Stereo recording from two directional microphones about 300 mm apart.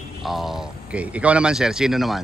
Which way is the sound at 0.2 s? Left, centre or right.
Centre.